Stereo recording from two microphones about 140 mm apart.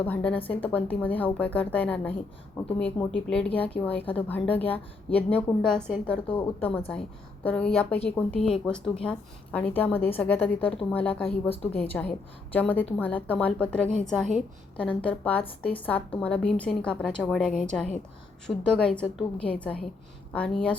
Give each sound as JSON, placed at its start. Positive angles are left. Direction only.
{"t": 0.0, "sound": "a woman's voice", "side_deg": 10}
{"t": 11.4, "sound": "a woman's voice", "side_deg": 45}
{"t": 11.7, "sound": "a woman's voice", "side_deg": 10}